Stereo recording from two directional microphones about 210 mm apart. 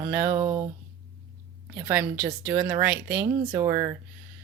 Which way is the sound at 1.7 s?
10° right (ahead or behind).